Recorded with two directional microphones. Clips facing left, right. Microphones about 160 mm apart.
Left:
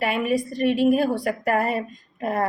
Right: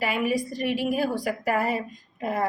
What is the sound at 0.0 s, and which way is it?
A woman's voice, 60° left (ahead or behind).